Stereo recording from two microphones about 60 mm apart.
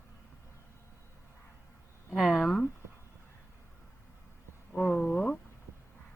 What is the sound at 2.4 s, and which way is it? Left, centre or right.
Speech, centre.